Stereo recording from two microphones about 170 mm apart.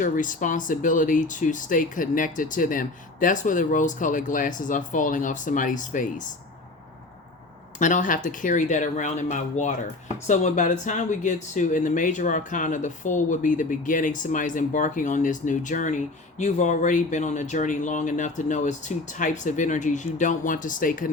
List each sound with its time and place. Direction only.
0.0 s speech: 50° left (ahead or behind)
7.8 s speech: 50° left (ahead or behind)